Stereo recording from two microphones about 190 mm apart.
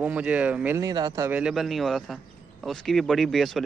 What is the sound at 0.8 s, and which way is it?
Speech, 20° right (ahead or behind).